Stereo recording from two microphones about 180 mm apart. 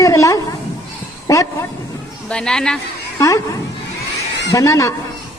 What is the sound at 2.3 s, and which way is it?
Speech, 5° left (ahead or behind).